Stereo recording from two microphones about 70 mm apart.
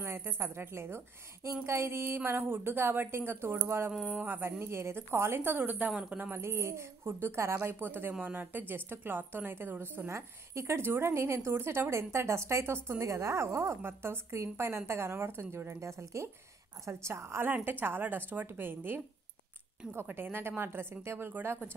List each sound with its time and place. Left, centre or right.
0.0 s a woman's voice: right
4.0 s a woman's voice: right
6.4 s a woman's voice: right
20.1 s a woman's voice: right